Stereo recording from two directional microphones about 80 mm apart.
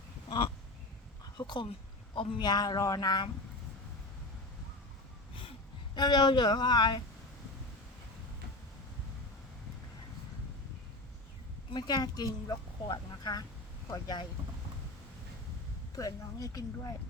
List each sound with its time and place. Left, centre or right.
0.3 s a sound: left
1.4 s speech: left
2.1 s speech: left
5.9 s speech: left
11.7 s speech: left
16.0 s speech: left